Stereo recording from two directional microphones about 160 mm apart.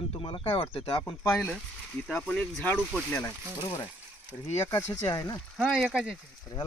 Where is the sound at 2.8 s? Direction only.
Centre (ahead or behind).